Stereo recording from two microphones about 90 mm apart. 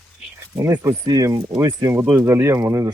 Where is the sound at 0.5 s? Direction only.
40° right (ahead or behind).